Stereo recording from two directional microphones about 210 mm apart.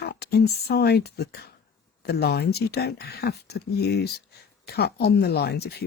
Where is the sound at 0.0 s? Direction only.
50° left (ahead or behind).